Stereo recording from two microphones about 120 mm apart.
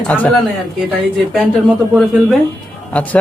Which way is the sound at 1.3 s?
Centre (ahead or behind).